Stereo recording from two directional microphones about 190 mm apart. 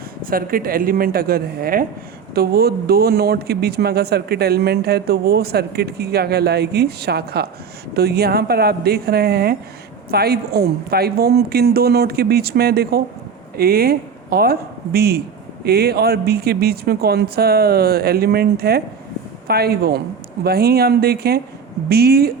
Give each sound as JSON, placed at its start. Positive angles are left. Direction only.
{"t": 0.3, "sound": "speech", "side_deg": -50}